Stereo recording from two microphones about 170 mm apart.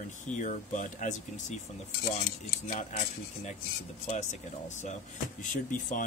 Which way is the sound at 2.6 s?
45° left (ahead or behind).